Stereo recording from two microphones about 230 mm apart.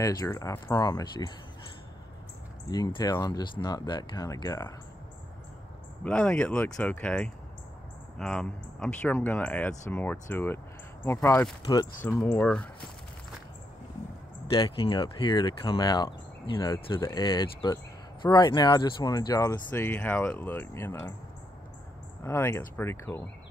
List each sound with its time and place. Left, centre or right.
0.0 s speech: centre
2.7 s speech: centre
6.0 s speech: centre
11.6 s speech: centre
14.5 s speech: left
22.2 s speech: centre